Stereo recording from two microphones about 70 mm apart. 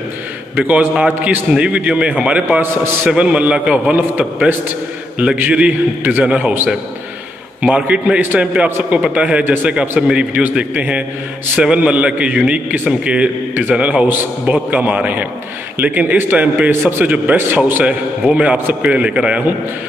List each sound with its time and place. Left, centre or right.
0.6 s a man's voice: right
2.6 s a man's voice: right
3.1 s a man's voice: centre
7.6 s a man's voice: centre
9.7 s a man's voice: centre